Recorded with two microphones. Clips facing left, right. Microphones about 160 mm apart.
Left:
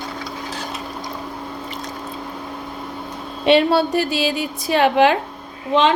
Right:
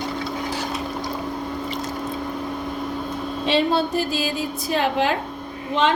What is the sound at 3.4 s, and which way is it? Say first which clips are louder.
A woman's voice: left 6 dB; 70° left (ahead or behind).